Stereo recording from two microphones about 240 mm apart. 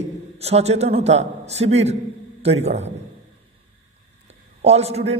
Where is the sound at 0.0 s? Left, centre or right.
Right.